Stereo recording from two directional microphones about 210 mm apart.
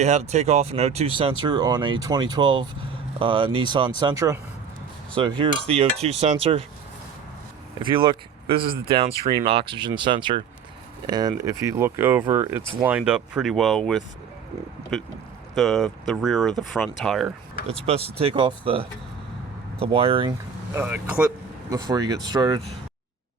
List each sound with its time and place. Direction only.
0.0 s speech: 35° right (ahead or behind); by 4.4 s 15° right (ahead or behind)
5.4 s speech: 25° right (ahead or behind)
7.8 s speech: 25° right (ahead or behind); by 17.3 s centre (ahead or behind)
17.7 s speech: 30° right (ahead or behind)
20.7 s speech: 10° right (ahead or behind)